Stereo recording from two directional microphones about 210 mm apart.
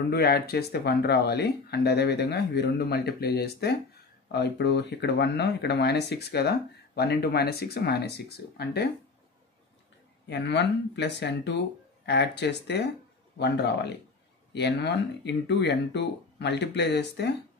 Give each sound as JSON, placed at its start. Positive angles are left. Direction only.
{"t": 0.1, "sound": "speech", "side_deg": 50}
{"t": 10.3, "sound": "speech", "side_deg": 55}